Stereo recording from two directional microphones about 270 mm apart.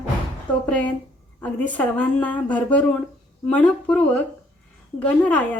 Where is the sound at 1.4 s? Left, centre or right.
Centre.